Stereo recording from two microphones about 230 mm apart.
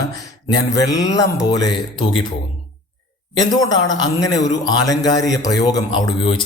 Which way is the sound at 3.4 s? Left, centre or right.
Centre.